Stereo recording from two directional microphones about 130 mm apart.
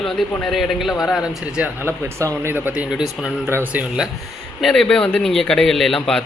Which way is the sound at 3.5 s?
15° right (ahead or behind).